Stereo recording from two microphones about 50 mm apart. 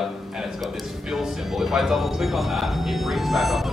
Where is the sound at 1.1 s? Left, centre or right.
Centre.